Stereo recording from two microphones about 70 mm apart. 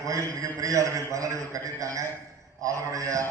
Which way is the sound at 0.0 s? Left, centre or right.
Right.